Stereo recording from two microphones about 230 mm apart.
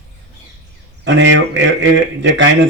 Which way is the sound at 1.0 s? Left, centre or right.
Right.